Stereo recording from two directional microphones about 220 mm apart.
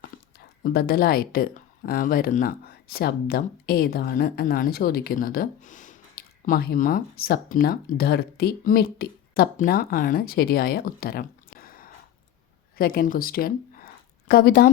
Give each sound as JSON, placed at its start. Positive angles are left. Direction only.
{"t": 0.6, "sound": "speech", "side_deg": 45}